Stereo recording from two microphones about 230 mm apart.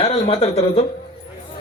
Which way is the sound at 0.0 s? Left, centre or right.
Left.